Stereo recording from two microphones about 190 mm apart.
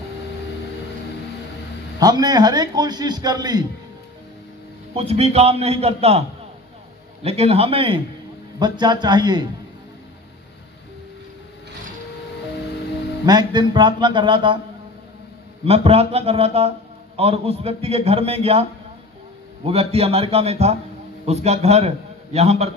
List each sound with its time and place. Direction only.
2.0 s a man's voice: 20° right (ahead or behind)
4.9 s a man's voice: 35° right (ahead or behind)
7.2 s a man's voice: 30° right (ahead or behind)
13.2 s a man's voice: 20° right (ahead or behind)
15.6 s a man's voice: 30° right (ahead or behind)